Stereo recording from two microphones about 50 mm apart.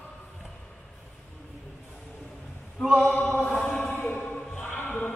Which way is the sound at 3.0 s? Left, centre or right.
Left.